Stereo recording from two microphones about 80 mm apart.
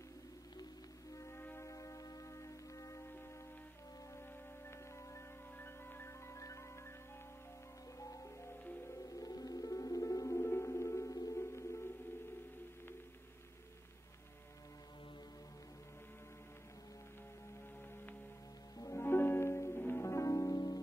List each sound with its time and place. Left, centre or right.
1.1 s music: left
5.1 s music: left
8.0 s music: left
18.8 s music: left